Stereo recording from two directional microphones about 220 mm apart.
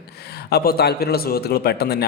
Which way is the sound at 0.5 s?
45° left (ahead or behind).